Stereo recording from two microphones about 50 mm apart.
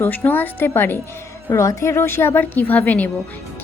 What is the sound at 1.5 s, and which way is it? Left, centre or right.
A woman's voice, left.